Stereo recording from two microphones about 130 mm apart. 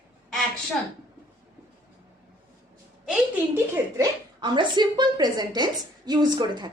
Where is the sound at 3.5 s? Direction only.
15° right (ahead or behind).